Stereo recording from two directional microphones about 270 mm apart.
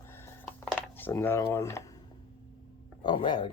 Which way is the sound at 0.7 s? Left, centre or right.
Centre.